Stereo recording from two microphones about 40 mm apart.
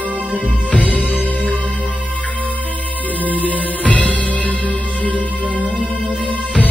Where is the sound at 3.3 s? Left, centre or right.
Left.